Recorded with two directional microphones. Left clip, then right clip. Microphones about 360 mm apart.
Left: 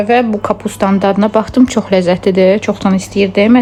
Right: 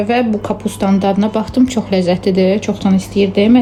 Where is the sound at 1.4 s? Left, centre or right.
Centre.